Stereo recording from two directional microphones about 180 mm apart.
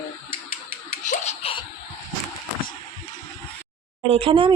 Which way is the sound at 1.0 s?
40° left (ahead or behind).